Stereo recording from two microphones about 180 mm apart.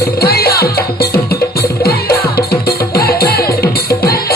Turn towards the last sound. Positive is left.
turn(degrees=60)  # may be behind; listen again after turning